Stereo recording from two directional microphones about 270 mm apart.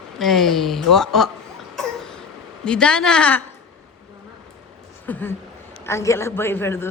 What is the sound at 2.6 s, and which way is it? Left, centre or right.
Speech, centre.